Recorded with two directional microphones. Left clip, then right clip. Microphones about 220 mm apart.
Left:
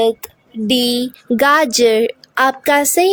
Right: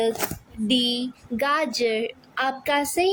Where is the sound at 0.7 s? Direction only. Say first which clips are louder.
Left 7 dB; 50° left (ahead or behind).